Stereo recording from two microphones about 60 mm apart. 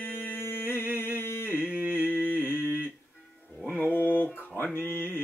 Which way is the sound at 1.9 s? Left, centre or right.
Left.